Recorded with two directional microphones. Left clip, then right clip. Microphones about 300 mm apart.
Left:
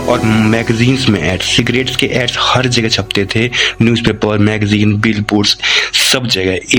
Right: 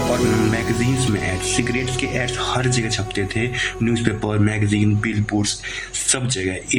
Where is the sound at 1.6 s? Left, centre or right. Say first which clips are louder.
Left 9 dB; left.